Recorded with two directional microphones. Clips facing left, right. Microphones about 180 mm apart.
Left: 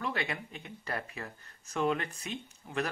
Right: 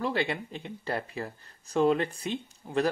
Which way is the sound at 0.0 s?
30° right (ahead or behind).